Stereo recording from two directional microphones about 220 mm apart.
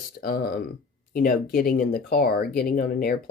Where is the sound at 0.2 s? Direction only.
40° left (ahead or behind).